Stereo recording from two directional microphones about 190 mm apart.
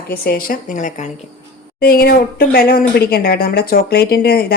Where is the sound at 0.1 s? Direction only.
50° left (ahead or behind).